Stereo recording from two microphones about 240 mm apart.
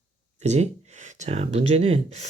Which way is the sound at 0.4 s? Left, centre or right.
Right.